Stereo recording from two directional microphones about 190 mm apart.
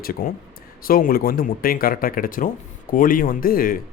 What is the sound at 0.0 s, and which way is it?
Speech, 50° left (ahead or behind).